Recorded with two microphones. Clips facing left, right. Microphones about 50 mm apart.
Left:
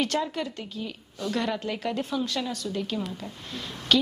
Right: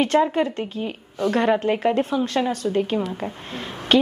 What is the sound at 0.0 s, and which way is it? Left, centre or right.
A woman's voice, right.